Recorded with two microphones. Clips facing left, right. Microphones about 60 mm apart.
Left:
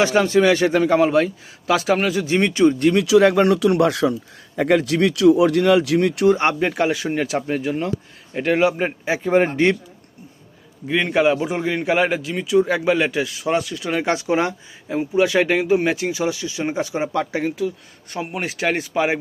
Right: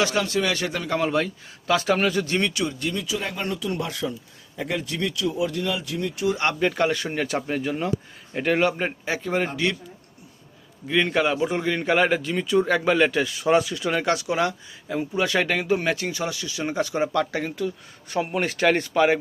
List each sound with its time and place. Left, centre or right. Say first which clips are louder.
0.0 s a man's voice: left 7 dB; left
0.9 s speech: left 7 dB; centre
2.2 s a man's voice: left 5 dB; centre
2.5 s speech: left 12 dB; left
2.7 s speech: left 13 dB; left
6.3 s a man's voice: left 5 dB; left
6.6 s a man's voice: left 2 dB; centre
9.3 s speech: left 9 dB; left
10.8 s a man's voice: left 4 dB; centre
14.0 s speech: left 5 dB; left